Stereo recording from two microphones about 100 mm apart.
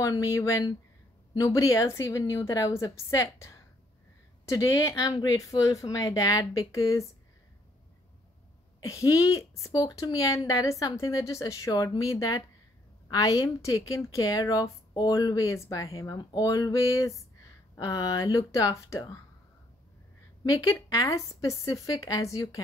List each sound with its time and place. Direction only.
0.0 s speech: 35° left (ahead or behind)
4.5 s speech: 35° left (ahead or behind)
8.8 s speech: 35° left (ahead or behind)
20.4 s speech: 35° left (ahead or behind)